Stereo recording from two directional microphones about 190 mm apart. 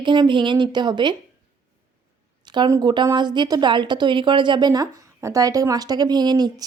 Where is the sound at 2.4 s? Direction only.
25° right (ahead or behind).